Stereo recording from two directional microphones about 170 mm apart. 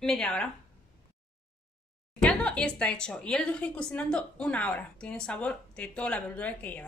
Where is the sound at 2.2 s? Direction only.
5° left (ahead or behind).